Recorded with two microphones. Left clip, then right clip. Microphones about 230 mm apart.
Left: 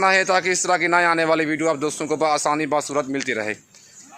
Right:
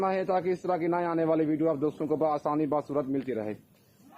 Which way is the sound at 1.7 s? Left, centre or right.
Left.